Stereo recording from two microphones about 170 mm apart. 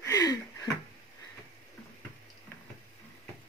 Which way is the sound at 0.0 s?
20° left (ahead or behind).